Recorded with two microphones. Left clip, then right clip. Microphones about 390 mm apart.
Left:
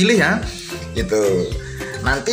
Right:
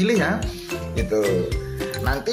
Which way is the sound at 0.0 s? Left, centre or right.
Right.